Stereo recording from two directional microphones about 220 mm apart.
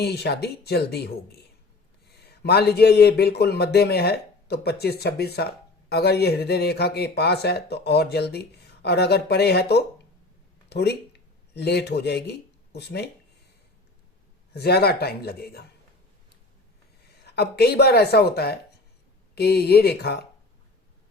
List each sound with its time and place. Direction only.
0.0 s speech: 50° left (ahead or behind)
14.5 s speech: 45° left (ahead or behind)
17.1 s speech: 50° left (ahead or behind)